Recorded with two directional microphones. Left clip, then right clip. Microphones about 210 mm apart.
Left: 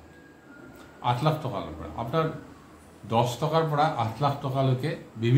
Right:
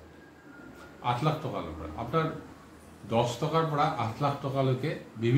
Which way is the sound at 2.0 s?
30° left (ahead or behind).